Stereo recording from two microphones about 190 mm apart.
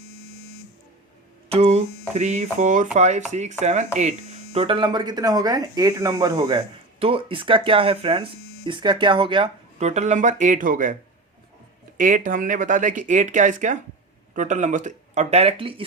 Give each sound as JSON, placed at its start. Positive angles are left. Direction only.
{"t": 1.5, "sound": "speech", "side_deg": -35}
{"t": 4.5, "sound": "speech", "side_deg": -25}
{"t": 11.9, "sound": "speech", "side_deg": -45}